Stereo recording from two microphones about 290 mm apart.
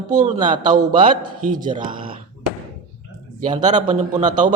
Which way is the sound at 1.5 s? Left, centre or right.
Right.